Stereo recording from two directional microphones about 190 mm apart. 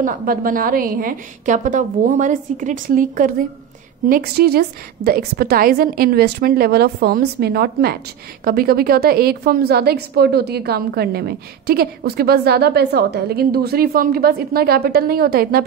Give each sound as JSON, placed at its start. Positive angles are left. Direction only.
{"t": 0.0, "sound": "a woman's voice", "side_deg": -45}
{"t": 4.1, "sound": "a woman's voice", "side_deg": -55}